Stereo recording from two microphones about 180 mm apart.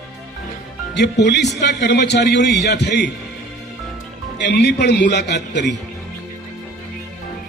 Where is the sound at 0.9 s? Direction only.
70° left (ahead or behind).